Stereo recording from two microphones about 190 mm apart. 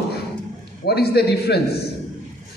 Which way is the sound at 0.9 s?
60° left (ahead or behind).